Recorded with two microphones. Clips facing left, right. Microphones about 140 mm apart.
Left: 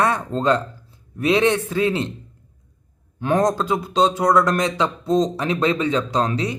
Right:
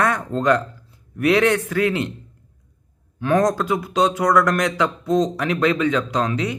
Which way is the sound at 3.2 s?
25° left (ahead or behind).